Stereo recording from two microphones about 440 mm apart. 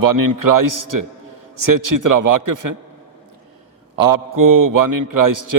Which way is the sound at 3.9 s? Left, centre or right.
Right.